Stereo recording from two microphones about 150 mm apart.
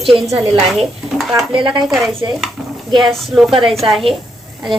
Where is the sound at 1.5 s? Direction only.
30° right (ahead or behind).